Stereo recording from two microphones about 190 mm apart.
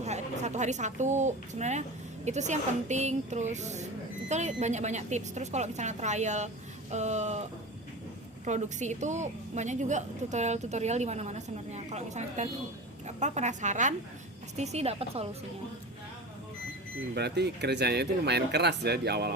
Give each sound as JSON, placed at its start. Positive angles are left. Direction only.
{"t": 0.0, "sound": "a woman's voice", "side_deg": -35}
{"t": 8.4, "sound": "a woman's voice", "side_deg": -40}
{"t": 17.2, "sound": "speech", "side_deg": -60}